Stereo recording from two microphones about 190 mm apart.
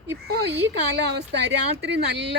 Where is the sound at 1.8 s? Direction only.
65° right (ahead or behind).